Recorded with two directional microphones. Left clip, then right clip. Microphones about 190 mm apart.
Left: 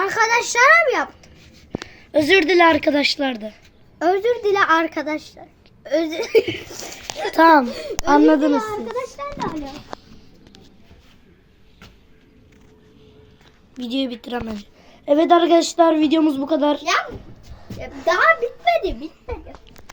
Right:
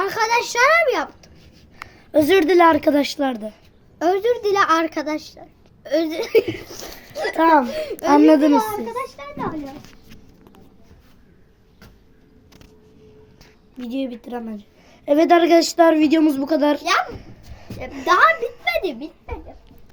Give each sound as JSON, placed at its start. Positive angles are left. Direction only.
{"t": 0.0, "sound": "a child's voice", "side_deg": -5}
{"t": 1.9, "sound": "a woman's voice", "side_deg": -20}
{"t": 6.4, "sound": "speech", "side_deg": 0}
{"t": 6.7, "sound": "a woman's voice", "side_deg": -15}
{"t": 7.3, "sound": "speech", "side_deg": 55}
{"t": 7.8, "sound": "a woman's voice", "side_deg": -25}
{"t": 13.7, "sound": "a woman's voice", "side_deg": 10}
{"t": 15.0, "sound": "a woman's voice", "side_deg": 0}
{"t": 17.1, "sound": "a sound", "side_deg": -10}
{"t": 18.0, "sound": "a child's voice", "side_deg": -60}